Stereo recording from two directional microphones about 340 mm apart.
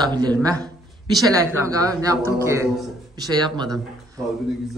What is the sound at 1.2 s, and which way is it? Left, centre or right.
A man's voice, centre.